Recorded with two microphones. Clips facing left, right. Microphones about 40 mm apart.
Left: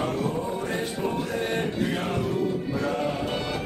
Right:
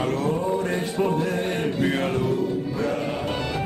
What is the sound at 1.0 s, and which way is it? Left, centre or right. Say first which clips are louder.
Music: right 7 dB; right.